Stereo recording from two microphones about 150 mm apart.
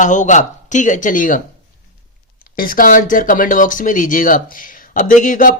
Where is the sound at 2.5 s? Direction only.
70° left (ahead or behind).